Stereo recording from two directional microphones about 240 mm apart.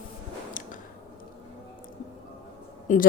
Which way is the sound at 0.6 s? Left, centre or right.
Left.